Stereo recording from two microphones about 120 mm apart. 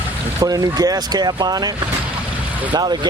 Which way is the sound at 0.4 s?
30° right (ahead or behind).